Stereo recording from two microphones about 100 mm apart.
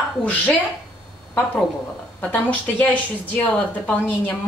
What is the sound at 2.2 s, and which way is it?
A woman's voice, 15° left (ahead or behind).